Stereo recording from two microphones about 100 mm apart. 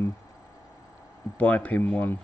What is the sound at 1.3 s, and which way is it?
Speech, 15° left (ahead or behind).